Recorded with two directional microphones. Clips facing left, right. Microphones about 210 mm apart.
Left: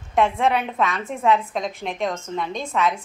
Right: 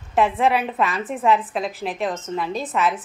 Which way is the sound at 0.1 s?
5° right (ahead or behind).